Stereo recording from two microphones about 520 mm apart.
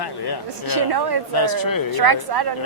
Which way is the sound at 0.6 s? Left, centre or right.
Right.